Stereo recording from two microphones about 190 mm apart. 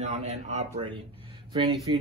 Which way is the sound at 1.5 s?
25° right (ahead or behind).